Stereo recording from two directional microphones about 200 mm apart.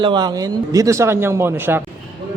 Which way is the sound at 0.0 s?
25° right (ahead or behind).